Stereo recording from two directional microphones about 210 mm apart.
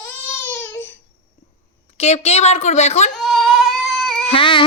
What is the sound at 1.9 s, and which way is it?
A woman's voice, 30° left (ahead or behind).